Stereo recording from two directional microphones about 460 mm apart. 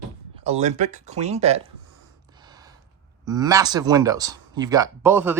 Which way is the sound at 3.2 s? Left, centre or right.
Centre.